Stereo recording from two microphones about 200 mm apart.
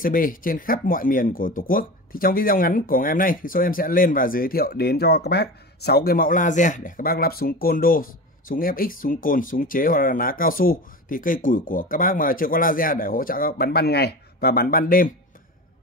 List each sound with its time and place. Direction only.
0.0 s speech: 45° left (ahead or behind)